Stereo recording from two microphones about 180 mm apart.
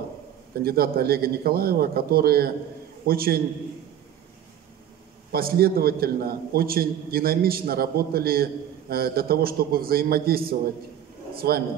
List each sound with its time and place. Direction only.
0.6 s a man's voice: 55° right (ahead or behind)
5.3 s a man's voice: 55° right (ahead or behind)